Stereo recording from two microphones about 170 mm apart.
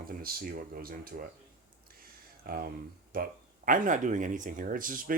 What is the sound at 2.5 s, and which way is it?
Speech, 60° right (ahead or behind).